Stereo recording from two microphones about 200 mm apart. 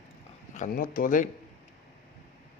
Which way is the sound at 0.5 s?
40° left (ahead or behind).